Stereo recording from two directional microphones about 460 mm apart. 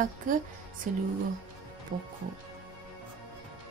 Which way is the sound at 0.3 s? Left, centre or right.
Centre.